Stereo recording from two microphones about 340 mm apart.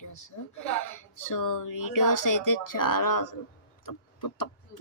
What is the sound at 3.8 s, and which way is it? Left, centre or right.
Clock, left.